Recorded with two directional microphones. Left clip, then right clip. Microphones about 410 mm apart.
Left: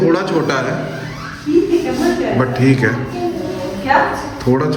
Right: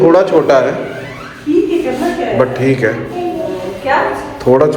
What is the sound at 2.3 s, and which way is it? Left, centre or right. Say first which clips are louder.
Speech: right 3 dB; centre.